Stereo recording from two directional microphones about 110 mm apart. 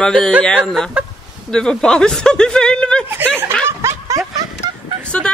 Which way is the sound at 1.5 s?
5° left (ahead or behind).